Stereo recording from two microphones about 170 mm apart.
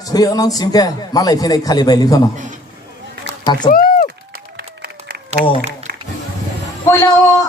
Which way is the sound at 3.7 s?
55° left (ahead or behind).